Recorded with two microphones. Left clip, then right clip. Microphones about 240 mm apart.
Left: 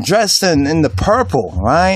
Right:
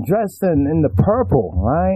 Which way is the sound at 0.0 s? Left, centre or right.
Centre.